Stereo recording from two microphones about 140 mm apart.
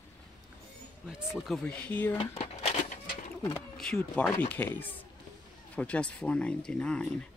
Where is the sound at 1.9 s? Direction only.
15° left (ahead or behind).